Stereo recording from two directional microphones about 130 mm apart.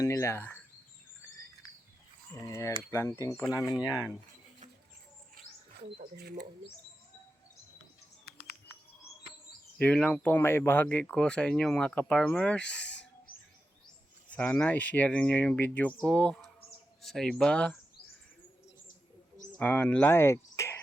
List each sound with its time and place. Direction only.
0.0 s speech: 25° left (ahead or behind)
2.5 s speech: 25° left (ahead or behind)
9.7 s speech: 10° left (ahead or behind)
14.3 s speech: 10° left (ahead or behind)
19.5 s speech: 10° left (ahead or behind)